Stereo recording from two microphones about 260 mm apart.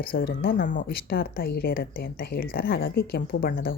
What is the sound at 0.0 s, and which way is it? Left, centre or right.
Speech, left.